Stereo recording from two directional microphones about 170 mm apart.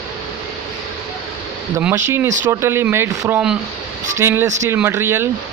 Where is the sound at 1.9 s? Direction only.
15° right (ahead or behind).